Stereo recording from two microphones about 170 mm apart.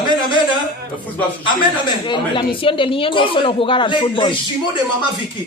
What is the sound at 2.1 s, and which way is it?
A woman's voice, 30° left (ahead or behind).